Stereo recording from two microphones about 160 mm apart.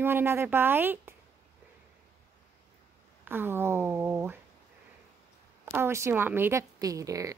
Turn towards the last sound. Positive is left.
turn(degrees=-20)  # may be behind; listen again after turning